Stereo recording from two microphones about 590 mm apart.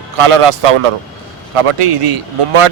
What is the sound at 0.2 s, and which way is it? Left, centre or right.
Speech, right.